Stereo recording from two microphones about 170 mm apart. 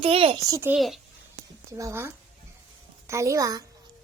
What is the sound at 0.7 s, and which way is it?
Speech, centre (ahead or behind).